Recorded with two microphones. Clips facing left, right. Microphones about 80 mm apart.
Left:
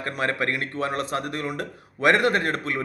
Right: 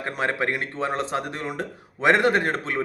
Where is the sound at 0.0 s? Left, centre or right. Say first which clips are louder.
Right 1 dB; right.